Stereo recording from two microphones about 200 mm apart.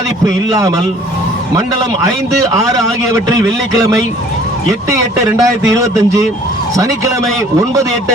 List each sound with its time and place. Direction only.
4.9 s a man's voice: 15° right (ahead or behind)